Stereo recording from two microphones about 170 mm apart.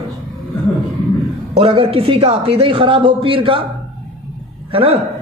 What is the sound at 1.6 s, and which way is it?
Speech, 35° right (ahead or behind).